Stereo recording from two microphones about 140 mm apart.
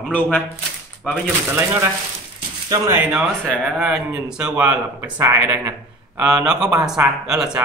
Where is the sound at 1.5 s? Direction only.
20° right (ahead or behind).